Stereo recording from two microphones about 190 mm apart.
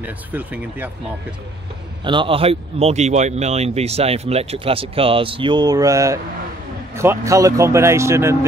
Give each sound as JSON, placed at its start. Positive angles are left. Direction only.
{"t": 0.0, "sound": "speech", "side_deg": -10}
{"t": 2.0, "sound": "speech", "side_deg": -25}